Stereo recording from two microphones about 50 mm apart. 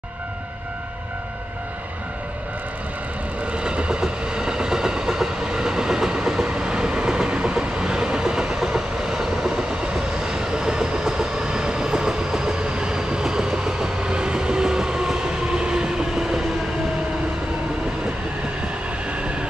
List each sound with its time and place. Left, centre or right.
3.5 s train: centre